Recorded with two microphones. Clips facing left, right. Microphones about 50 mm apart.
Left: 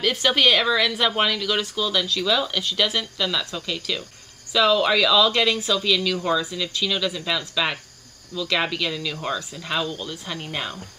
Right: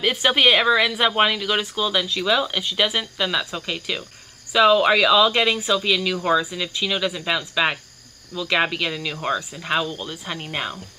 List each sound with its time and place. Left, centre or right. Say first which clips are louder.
0.0 s speech: right 1 dB; centre